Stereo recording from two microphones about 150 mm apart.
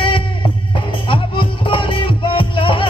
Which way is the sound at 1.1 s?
35° left (ahead or behind).